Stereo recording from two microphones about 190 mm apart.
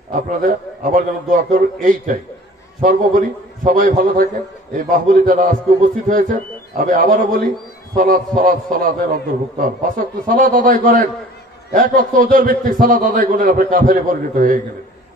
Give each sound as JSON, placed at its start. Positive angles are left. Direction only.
{"t": 0.1, "sound": "a man's voice", "side_deg": -45}